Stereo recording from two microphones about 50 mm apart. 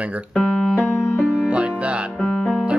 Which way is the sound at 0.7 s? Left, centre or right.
Left.